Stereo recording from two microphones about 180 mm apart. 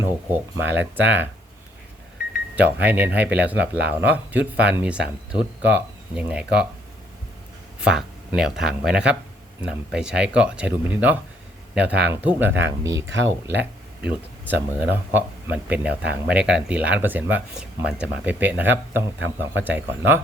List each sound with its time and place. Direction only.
0.0 s speech: 10° right (ahead or behind)
2.6 s speech: 10° right (ahead or behind)
3.8 s speech: 65° right (ahead or behind)
4.1 s speech: 10° right (ahead or behind)
7.8 s speech: 5° right (ahead or behind)
13.1 s speech: 90° right
13.6 s speech: 10° right (ahead or behind)